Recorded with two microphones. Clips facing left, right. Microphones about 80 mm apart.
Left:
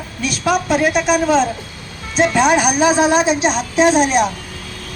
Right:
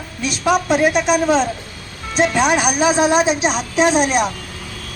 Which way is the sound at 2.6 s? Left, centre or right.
Centre.